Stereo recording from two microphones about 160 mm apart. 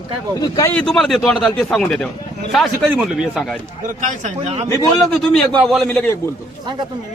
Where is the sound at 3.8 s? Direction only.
50° right (ahead or behind).